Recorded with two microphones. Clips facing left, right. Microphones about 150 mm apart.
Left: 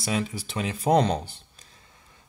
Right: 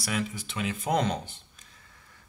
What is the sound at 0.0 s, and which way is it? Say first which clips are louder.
Speech: left 3 dB; 30° left (ahead or behind).